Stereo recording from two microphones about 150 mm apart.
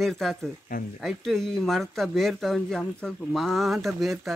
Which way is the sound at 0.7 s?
70° left (ahead or behind).